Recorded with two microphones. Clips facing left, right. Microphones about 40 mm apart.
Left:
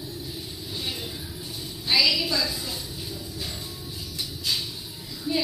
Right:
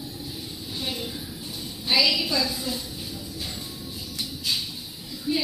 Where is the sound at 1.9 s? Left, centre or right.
Right.